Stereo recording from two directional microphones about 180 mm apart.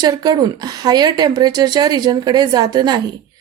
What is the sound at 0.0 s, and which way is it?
A woman's voice, 20° right (ahead or behind).